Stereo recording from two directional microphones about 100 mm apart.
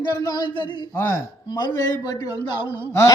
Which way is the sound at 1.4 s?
45° left (ahead or behind).